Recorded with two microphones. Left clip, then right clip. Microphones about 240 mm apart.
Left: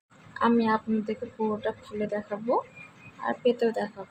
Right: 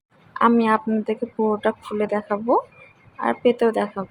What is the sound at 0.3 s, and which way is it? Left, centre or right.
Speech, right.